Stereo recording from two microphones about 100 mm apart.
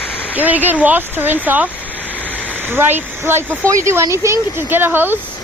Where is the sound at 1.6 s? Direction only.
15° left (ahead or behind).